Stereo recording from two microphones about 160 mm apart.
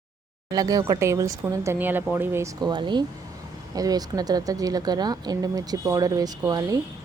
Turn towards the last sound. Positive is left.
turn(degrees=-25)  # may be behind; listen again after turning